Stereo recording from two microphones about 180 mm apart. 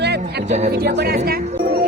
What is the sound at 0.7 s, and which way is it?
Speech, 60° right (ahead or behind).